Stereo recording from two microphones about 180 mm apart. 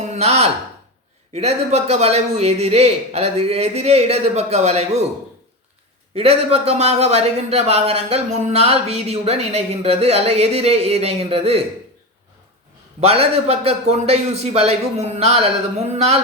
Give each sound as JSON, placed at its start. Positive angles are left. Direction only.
{"t": 0.0, "sound": "a sound", "side_deg": -35}
{"t": 1.3, "sound": "speech", "side_deg": -35}
{"t": 6.1, "sound": "speech", "side_deg": -35}
{"t": 13.0, "sound": "speech", "side_deg": -35}